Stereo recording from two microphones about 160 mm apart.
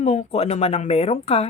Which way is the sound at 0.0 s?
40° left (ahead or behind).